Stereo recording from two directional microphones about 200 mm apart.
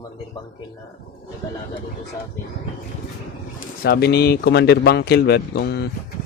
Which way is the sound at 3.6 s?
50° left (ahead or behind).